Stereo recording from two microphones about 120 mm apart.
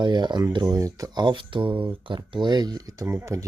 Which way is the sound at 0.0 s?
40° right (ahead or behind).